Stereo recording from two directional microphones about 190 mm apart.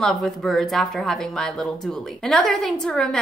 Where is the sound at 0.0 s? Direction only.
Centre (ahead or behind).